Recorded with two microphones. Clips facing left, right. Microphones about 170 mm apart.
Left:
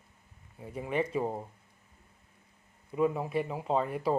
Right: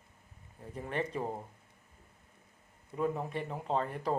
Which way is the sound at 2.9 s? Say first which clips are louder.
Left 5 dB; 10° left (ahead or behind).